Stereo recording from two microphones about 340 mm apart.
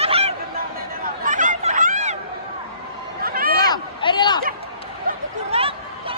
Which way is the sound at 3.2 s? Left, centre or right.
Right.